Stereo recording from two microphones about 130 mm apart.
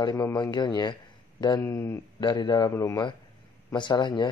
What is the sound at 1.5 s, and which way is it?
Speech, 20° left (ahead or behind).